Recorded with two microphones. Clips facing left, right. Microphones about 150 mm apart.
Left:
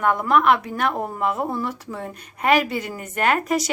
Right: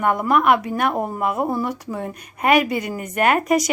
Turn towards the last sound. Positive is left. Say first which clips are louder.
# right 3 dB
turn(degrees=-10)  # may be behind; listen again after turning